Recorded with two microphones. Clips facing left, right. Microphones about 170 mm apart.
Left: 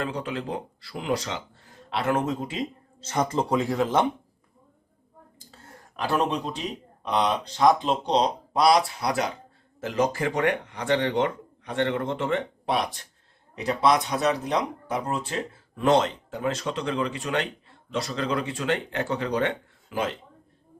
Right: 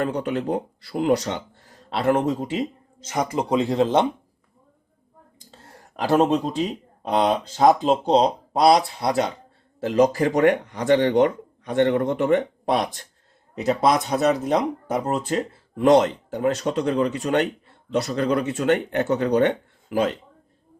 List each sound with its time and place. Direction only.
0.0 s speech: 45° right (ahead or behind)
3.0 s speech: 10° right (ahead or behind)
3.6 s speech: 25° right (ahead or behind)
6.1 s speech: 40° right (ahead or behind)
8.6 s speech: 25° right (ahead or behind)
9.8 s speech: 35° right (ahead or behind)